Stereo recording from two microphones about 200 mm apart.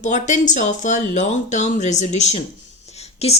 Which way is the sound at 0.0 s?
35° left (ahead or behind).